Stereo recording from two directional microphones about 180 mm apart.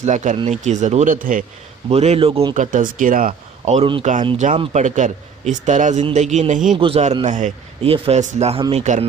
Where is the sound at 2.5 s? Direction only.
45° right (ahead or behind).